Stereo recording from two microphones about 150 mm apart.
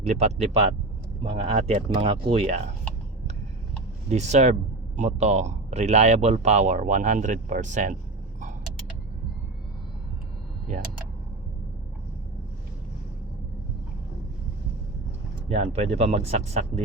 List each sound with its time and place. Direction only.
0.0 s speech: 45° right (ahead or behind)
4.1 s speech: 50° right (ahead or behind)
15.4 s speech: 45° right (ahead or behind)